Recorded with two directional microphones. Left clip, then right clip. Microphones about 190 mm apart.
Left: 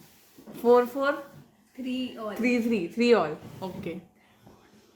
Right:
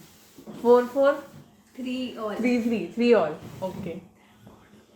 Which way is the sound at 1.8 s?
10° right (ahead or behind).